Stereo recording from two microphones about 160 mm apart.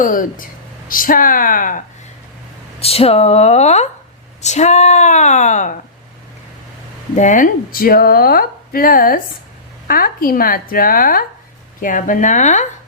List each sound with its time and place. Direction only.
0.0 s speech: 60° left (ahead or behind)
2.8 s speech: 40° left (ahead or behind)
7.2 s speech: 55° left (ahead or behind)